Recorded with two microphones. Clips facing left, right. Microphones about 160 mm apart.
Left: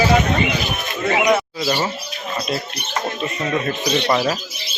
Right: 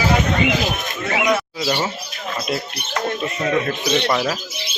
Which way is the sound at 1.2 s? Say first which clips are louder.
Left 2 dB; 25° left (ahead or behind).